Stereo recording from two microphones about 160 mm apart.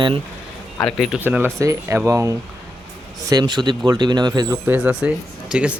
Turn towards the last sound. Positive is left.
turn(degrees=-5)  # may be behind; listen again after turning